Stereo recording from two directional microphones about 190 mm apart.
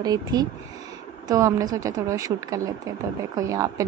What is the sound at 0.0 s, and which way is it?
A woman's voice, 20° right (ahead or behind).